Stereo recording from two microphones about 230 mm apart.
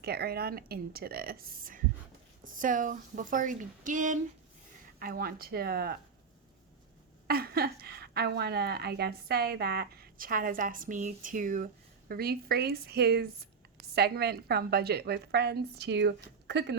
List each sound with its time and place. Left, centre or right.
0.0 s a woman's voice: right
7.3 s a woman's voice: right